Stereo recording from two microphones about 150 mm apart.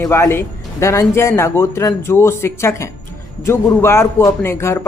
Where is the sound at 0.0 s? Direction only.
15° left (ahead or behind).